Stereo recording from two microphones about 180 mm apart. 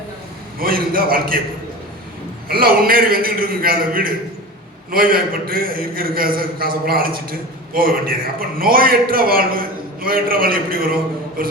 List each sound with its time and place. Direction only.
0.6 s a man's voice: 55° right (ahead or behind)
2.5 s a man's voice: 55° right (ahead or behind)